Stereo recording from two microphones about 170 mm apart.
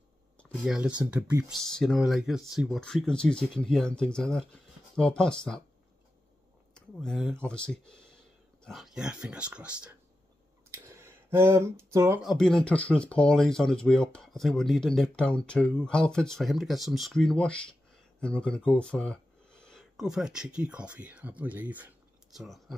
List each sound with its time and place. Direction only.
0.5 s speech: 5° right (ahead or behind)
6.7 s speech: 5° left (ahead or behind)
10.7 s a sound: 15° right (ahead or behind)
12.2 s speech: centre (ahead or behind)